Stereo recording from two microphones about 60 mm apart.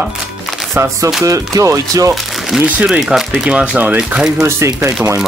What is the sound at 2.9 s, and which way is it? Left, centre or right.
Speech, centre.